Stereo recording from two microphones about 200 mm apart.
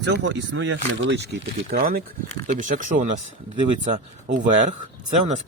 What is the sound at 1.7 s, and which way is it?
Speech, 45° right (ahead or behind).